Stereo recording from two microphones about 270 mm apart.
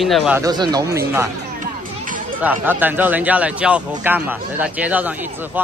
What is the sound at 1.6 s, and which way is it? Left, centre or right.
Music, right.